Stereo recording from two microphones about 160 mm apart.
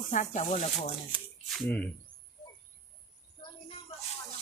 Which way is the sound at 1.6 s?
10° left (ahead or behind).